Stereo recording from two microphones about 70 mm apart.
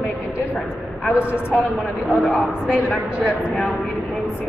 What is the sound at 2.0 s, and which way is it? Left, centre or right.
Speech, centre.